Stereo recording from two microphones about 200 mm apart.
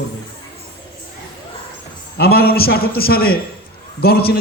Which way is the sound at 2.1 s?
50° left (ahead or behind).